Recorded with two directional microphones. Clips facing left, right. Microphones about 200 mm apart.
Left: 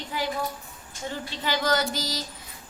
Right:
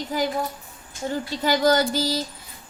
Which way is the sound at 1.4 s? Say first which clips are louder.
Right 6 dB; 40° right (ahead or behind).